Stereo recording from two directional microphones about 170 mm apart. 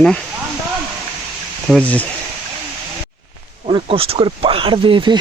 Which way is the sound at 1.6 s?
5° left (ahead or behind).